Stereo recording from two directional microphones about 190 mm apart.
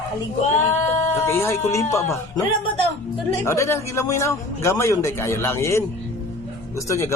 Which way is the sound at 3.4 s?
15° left (ahead or behind).